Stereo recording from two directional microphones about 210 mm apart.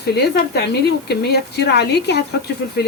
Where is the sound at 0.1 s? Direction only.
50° left (ahead or behind).